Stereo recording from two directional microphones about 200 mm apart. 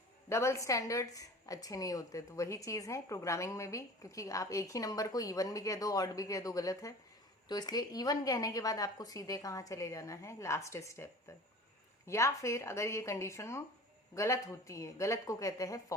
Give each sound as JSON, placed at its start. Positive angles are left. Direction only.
{"t": 0.3, "sound": "a woman's voice", "side_deg": 15}